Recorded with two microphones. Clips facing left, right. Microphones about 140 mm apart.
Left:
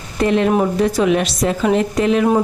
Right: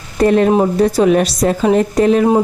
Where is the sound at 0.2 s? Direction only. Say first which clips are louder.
Right 4 dB; 40° right (ahead or behind).